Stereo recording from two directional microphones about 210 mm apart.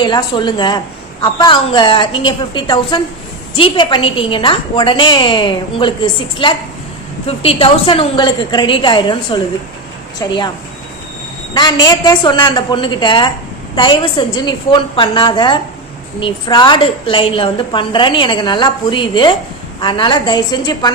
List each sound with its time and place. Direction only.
0.0 s a woman's voice: 20° left (ahead or behind)
11.5 s a woman's voice: 20° left (ahead or behind)